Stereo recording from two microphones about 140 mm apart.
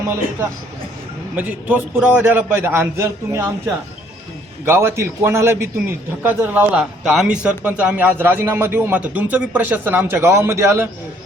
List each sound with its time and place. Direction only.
1.4 s a man's voice: 10° right (ahead or behind)
4.6 s a man's voice: 15° right (ahead or behind)